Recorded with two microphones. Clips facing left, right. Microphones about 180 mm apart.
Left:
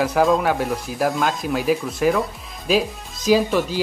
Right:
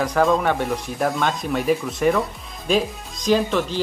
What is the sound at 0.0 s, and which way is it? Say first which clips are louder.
Speech: left 1 dB; 5° left (ahead or behind).